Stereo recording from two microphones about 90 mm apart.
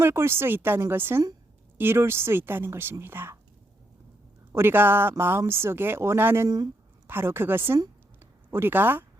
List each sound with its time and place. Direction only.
0.0 s speech: 30° right (ahead or behind)
4.5 s speech: 25° right (ahead or behind)
8.2 s a sound: 25° right (ahead or behind)